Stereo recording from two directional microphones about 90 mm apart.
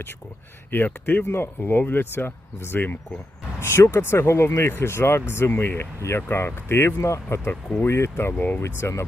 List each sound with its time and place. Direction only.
0.7 s speech: 25° left (ahead or behind)